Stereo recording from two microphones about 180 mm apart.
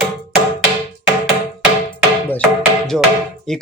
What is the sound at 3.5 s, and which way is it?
Speech, 5° left (ahead or behind).